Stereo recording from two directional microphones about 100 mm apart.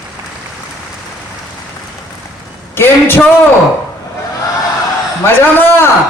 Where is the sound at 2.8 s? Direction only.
20° left (ahead or behind).